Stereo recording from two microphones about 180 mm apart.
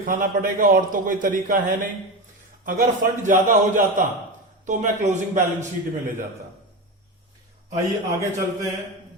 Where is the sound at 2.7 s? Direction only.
45° right (ahead or behind).